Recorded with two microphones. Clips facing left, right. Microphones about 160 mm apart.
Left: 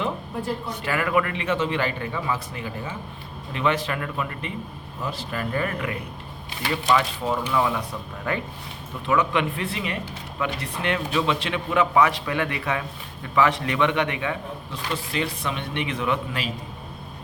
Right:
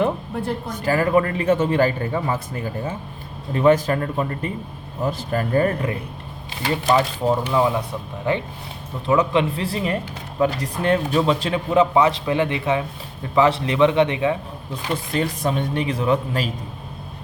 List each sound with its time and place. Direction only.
0.0 s speech: 50° right (ahead or behind); by 7.8 s 25° right (ahead or behind)
9.0 s a man's voice: 30° right (ahead or behind)
15.1 s speech: 45° right (ahead or behind)